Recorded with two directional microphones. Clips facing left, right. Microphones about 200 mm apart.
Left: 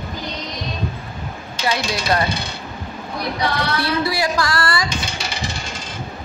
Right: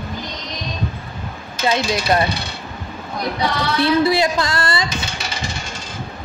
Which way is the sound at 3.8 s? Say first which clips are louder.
Right 9 dB; 20° right (ahead or behind).